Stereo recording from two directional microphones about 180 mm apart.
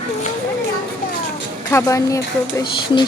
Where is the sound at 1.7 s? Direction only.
15° left (ahead or behind).